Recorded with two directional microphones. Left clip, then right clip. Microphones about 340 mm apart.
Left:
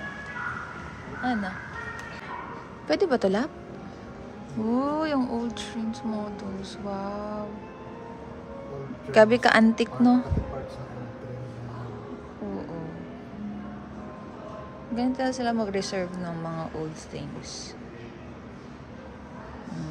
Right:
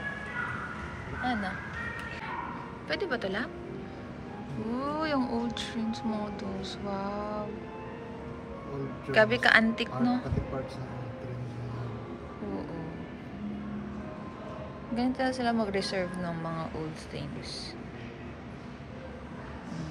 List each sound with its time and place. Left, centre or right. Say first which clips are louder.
1.2 s speech: left 3 dB; centre
2.9 s speech: left 8 dB; centre
4.6 s speech: left 5 dB; centre
9.1 s speech: left 4 dB; centre
15.0 s speech: left 2 dB; centre